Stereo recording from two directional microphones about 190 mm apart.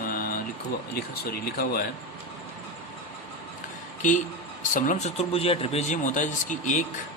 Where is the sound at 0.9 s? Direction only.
55° left (ahead or behind).